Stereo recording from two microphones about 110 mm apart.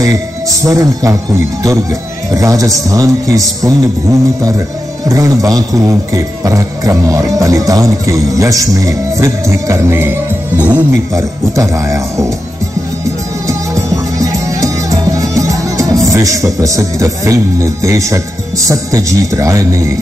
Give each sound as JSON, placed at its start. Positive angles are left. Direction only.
{"t": 0.0, "sound": "speech", "side_deg": -30}
{"t": 5.0, "sound": "speech", "side_deg": -30}
{"t": 11.1, "sound": "speech", "side_deg": -30}
{"t": 14.1, "sound": "music", "side_deg": -30}
{"t": 18.7, "sound": "speech", "side_deg": -30}